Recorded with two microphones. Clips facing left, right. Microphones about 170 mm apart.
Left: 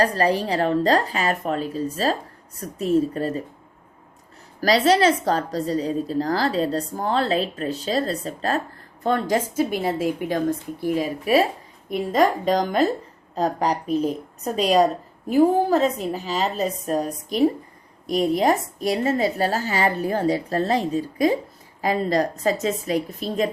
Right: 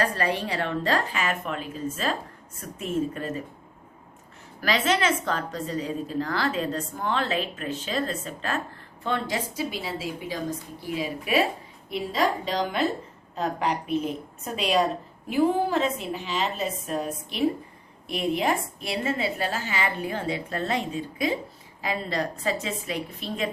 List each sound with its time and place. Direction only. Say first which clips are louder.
0.0 s a woman's voice: left 6 dB; 35° left (ahead or behind)
4.6 s a woman's voice: left 7 dB; 35° left (ahead or behind)